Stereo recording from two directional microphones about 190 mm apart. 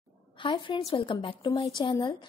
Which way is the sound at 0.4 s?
25° left (ahead or behind).